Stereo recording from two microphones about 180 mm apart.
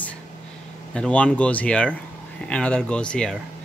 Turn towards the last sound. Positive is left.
turn(degrees=5)  # may be behind; listen again after turning